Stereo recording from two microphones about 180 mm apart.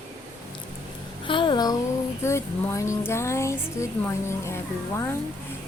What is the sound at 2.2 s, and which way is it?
A woman's voice, 15° left (ahead or behind).